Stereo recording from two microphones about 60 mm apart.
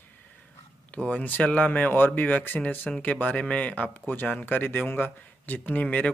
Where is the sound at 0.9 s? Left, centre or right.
Left.